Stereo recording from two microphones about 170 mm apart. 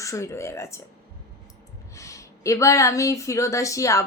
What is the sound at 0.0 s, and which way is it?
Speech, 20° left (ahead or behind).